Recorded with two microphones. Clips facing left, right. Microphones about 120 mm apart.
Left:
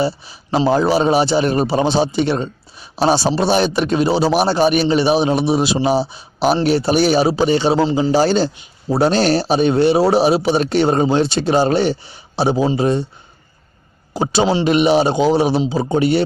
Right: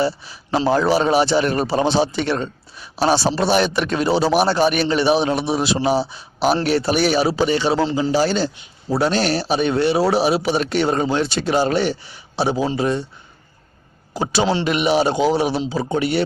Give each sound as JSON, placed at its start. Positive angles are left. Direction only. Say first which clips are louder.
{"t": 0.0, "sound": "a man's voice", "louder": "left 1 dB", "side_deg": 15}
{"t": 14.1, "sound": "speech", "louder": "left 3 dB", "side_deg": 20}